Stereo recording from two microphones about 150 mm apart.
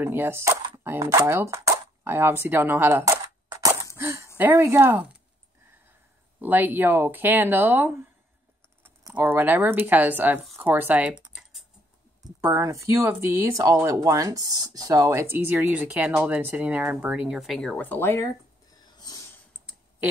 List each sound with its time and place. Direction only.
0.0 s speech: 15° right (ahead or behind)
3.6 s a sound: 15° right (ahead or behind)
4.4 s speech: 15° right (ahead or behind)
6.4 s speech: 10° right (ahead or behind)
12.2 s speech: 20° right (ahead or behind); by 18.8 s 15° left (ahead or behind)
18.8 s a sound: 30° left (ahead or behind)